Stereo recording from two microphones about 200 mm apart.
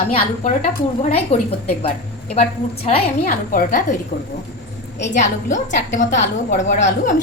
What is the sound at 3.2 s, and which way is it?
Speech, 45° left (ahead or behind).